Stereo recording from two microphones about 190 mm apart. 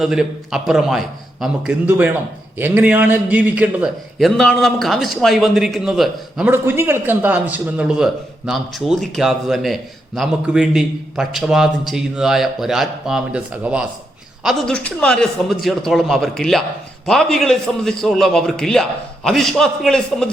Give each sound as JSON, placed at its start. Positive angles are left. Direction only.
{"t": 0.0, "sound": "a man's voice", "side_deg": 0}
{"t": 14.4, "sound": "a man's voice", "side_deg": 5}